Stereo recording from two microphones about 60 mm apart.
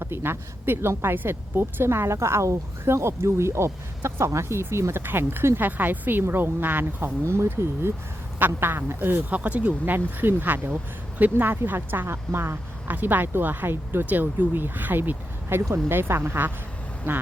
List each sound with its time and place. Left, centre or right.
0.0 s a woman's voice: right
9.3 s a woman's voice: right